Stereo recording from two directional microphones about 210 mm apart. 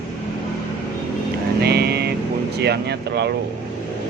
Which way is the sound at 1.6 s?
50° right (ahead or behind).